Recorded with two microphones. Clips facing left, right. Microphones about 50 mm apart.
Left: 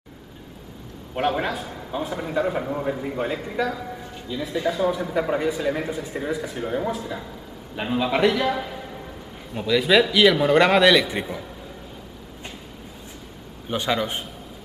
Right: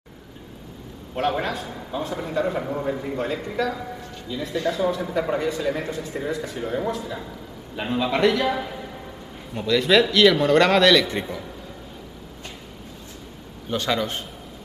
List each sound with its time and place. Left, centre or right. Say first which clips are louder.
1.1 s a man's voice: left 1 dB; centre
13.7 s a man's voice: even; centre